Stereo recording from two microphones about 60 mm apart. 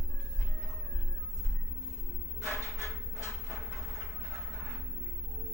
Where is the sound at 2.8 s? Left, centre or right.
Left.